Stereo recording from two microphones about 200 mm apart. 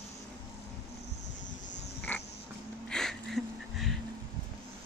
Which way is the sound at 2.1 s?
5° left (ahead or behind).